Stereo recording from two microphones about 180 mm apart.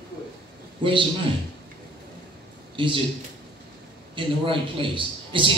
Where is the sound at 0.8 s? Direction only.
30° right (ahead or behind).